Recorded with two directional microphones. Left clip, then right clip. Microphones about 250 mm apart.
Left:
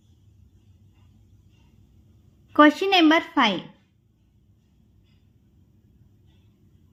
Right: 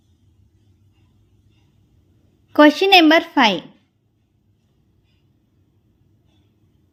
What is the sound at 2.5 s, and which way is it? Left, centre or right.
A woman's voice, centre.